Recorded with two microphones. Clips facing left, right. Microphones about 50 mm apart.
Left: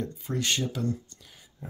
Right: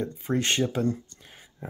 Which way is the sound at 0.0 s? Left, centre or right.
Right.